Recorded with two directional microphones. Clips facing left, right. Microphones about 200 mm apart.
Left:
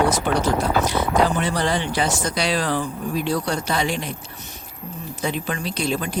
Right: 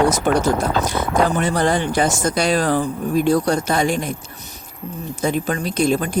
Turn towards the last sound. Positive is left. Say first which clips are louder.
# right 6 dB
turn(degrees=-45)  # may be behind; listen again after turning